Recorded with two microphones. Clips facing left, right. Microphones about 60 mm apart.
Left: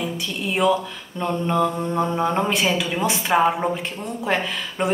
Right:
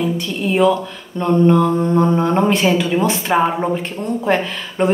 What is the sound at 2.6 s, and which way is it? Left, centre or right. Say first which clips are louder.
Speech: right 6 dB; centre.